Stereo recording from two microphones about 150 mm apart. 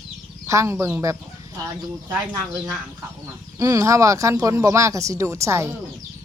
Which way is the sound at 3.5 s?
20° right (ahead or behind).